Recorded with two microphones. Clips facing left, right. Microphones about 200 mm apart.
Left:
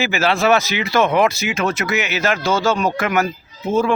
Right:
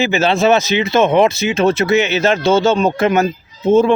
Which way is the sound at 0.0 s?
25° right (ahead or behind).